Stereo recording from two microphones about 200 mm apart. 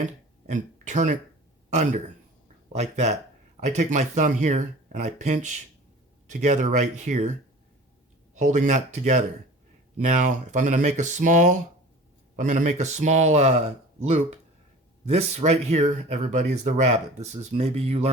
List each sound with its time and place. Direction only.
0.0 s speech: 35° right (ahead or behind)
8.4 s speech: 35° right (ahead or behind)